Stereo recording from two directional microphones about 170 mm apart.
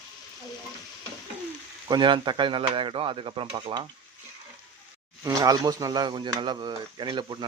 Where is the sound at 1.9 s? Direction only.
30° right (ahead or behind).